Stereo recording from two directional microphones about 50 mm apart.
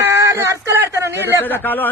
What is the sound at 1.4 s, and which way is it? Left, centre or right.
Speech, left.